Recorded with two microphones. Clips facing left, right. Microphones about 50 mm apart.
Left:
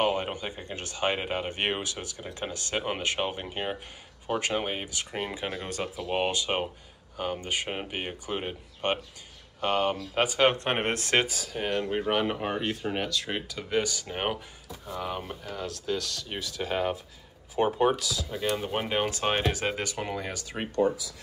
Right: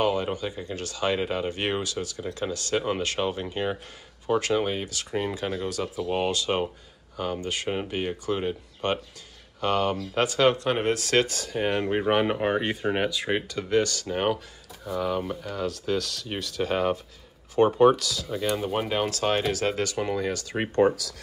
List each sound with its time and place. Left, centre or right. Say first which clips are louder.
0.0 s speech: right 2 dB; left
10.4 s speech: right 3 dB; left
11.2 s speech: right 5 dB; centre
11.8 s speech: right 4 dB; right
12.1 s speech: right 6 dB; centre
13.5 s speech: right 3 dB; centre
20.0 s speech: right 6 dB; centre
20.8 s speech: right 4 dB; right